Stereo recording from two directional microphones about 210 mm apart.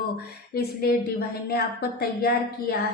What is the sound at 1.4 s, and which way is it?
A woman's voice, 50° left (ahead or behind).